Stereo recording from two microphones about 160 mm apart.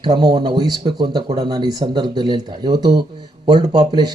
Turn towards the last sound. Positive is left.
turn(degrees=-25)  # may be behind; listen again after turning